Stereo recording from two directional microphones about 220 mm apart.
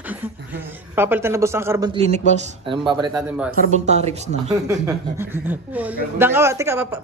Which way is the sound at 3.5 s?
30° right (ahead or behind).